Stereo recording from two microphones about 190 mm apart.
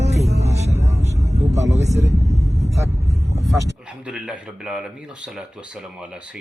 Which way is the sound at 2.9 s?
35° right (ahead or behind).